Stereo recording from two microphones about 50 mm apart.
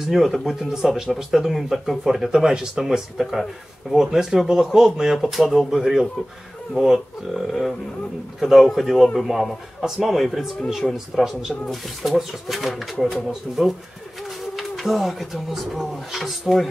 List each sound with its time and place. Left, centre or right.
0.0 s speech: centre